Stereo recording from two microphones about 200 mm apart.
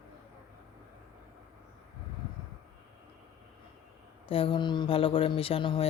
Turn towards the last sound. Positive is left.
turn(degrees=25)  # may be behind; listen again after turning